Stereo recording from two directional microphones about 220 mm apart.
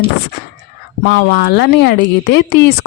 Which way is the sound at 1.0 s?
50° left (ahead or behind).